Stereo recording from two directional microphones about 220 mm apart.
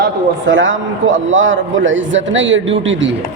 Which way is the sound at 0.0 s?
60° right (ahead or behind).